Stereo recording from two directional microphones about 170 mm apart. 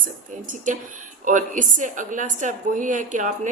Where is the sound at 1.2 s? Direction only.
50° right (ahead or behind).